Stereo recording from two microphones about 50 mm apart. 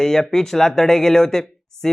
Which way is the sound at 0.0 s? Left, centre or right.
Centre.